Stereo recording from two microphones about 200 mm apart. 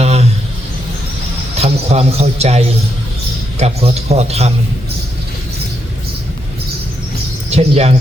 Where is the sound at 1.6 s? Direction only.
30° right (ahead or behind).